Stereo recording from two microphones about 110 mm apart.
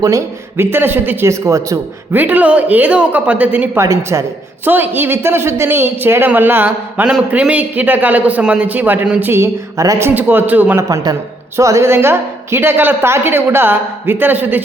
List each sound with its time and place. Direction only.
0.0 s a woman's voice: 25° right (ahead or behind)
2.1 s speech: 15° right (ahead or behind); by 10.1 s 30° right (ahead or behind)
10.2 s speech: 20° right (ahead or behind)
10.8 s a woman's voice: 35° right (ahead or behind); by 14.6 s 15° right (ahead or behind)